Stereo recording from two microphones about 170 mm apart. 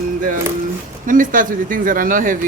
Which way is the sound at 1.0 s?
50° right (ahead or behind).